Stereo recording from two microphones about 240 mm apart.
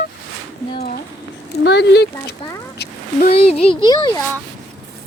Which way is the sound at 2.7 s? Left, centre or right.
Left.